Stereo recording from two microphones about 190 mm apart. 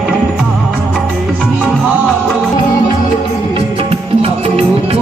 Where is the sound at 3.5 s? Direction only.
30° right (ahead or behind).